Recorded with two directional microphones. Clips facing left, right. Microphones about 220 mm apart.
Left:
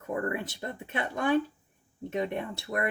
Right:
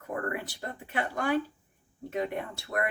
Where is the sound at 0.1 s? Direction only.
25° left (ahead or behind).